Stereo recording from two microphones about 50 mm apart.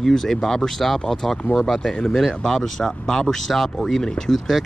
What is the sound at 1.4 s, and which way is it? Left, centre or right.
Speech, left.